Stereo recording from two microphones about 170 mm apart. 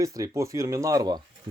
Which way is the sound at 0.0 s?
20° right (ahead or behind).